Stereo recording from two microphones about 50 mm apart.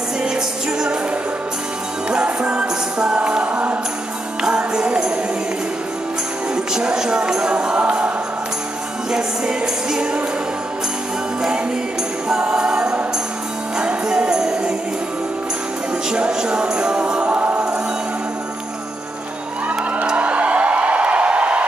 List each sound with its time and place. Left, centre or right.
2.0 s music: right
6.5 s music: centre
9.1 s music: centre
12.3 s music: centre
16.1 s music: centre
19.7 s a sound: right